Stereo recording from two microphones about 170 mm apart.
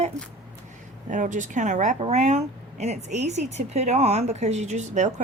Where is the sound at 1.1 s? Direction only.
50° right (ahead or behind).